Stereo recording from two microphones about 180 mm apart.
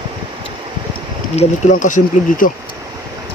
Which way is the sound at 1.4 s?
45° left (ahead or behind).